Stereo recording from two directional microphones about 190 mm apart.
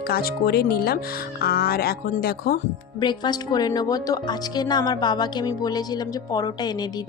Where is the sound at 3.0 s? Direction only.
25° left (ahead or behind).